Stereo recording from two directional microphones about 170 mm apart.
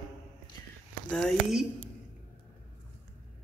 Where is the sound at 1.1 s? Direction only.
5° left (ahead or behind).